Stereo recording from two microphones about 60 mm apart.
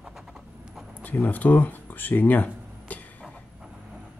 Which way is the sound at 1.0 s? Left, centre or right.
Left.